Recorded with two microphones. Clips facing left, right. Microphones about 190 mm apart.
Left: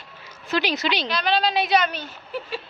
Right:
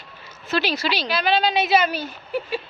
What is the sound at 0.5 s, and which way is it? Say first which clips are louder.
Speech: even; 15° left (ahead or behind).